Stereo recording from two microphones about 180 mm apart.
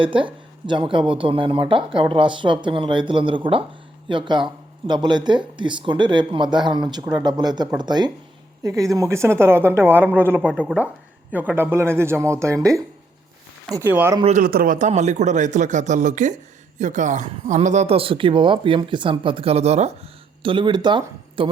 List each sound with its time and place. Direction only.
0.0 s a woman's voice: 30° right (ahead or behind); by 10.4 s 10° right (ahead or behind)
10.4 s a woman's voice: 5° left (ahead or behind); by 12.5 s 15° right (ahead or behind)
13.7 s a woman's voice: 20° right (ahead or behind)
14.3 s a man's voice: 55° right (ahead or behind); by 21.5 s 25° right (ahead or behind)